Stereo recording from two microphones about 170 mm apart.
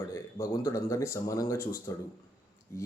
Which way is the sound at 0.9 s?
15° left (ahead or behind).